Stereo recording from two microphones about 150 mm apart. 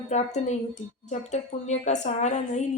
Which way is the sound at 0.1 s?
50° left (ahead or behind).